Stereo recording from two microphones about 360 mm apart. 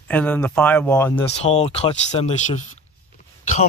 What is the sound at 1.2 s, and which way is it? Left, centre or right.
Speech, centre.